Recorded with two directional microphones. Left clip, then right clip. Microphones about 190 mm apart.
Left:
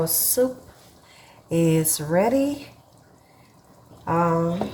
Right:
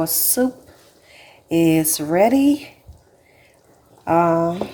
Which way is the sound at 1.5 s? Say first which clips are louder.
Right 5 dB; 35° right (ahead or behind).